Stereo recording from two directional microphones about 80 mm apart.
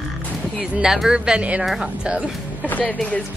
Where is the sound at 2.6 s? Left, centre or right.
Left.